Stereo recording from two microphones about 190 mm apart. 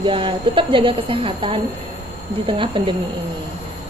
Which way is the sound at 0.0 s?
25° right (ahead or behind).